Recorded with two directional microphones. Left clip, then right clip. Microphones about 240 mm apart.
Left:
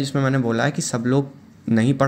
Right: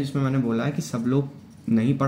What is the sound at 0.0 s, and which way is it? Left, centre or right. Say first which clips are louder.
Speech: left 5 dB; left.